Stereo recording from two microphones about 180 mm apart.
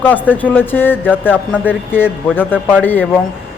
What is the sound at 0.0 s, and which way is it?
A man's voice, 10° left (ahead or behind).